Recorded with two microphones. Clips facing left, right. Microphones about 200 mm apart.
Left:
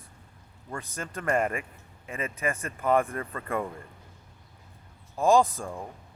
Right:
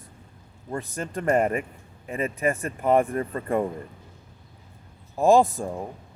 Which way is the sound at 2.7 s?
15° right (ahead or behind).